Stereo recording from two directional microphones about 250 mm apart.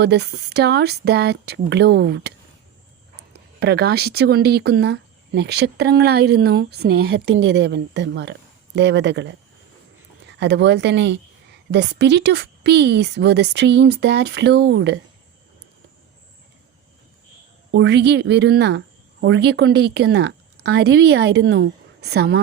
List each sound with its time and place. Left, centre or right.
0.0 s speech: right
3.6 s speech: right
10.4 s a woman's voice: right
17.7 s a woman's voice: right